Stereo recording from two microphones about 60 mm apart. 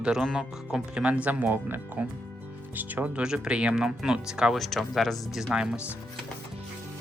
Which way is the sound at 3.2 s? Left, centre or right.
Centre.